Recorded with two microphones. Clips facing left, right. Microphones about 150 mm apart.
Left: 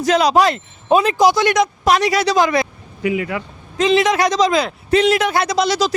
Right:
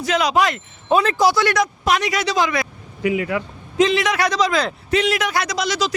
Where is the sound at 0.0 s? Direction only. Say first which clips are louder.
Left 4 dB; 35° left (ahead or behind).